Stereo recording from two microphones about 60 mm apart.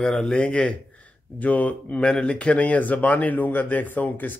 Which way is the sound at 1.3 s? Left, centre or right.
Left.